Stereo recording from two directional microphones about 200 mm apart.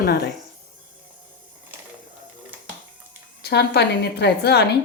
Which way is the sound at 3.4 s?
55° left (ahead or behind).